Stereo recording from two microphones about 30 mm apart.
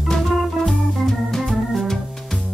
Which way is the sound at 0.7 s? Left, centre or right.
Centre.